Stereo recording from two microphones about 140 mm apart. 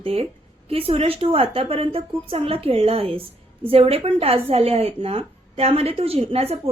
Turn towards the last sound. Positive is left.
turn(degrees=-45)  # may be behind; listen again after turning